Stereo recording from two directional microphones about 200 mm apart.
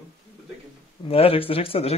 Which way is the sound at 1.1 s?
30° left (ahead or behind).